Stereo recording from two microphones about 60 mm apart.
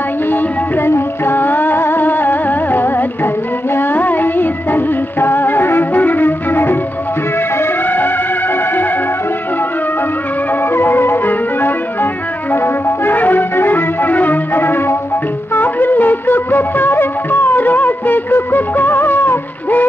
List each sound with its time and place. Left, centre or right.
0.3 s music: left
10.7 s music: left